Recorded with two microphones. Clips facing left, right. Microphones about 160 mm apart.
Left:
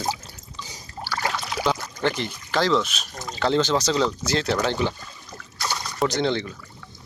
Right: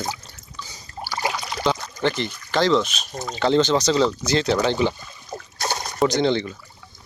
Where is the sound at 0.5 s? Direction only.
15° left (ahead or behind).